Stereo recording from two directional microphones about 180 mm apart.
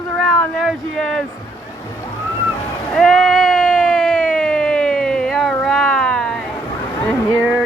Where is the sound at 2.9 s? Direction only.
Centre (ahead or behind).